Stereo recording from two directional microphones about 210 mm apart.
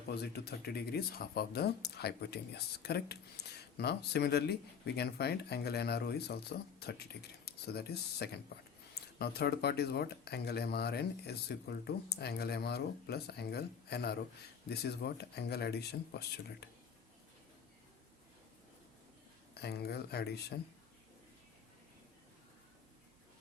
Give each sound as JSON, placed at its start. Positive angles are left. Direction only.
{"t": 0.1, "sound": "speech", "side_deg": 50}
{"t": 19.5, "sound": "speech", "side_deg": 50}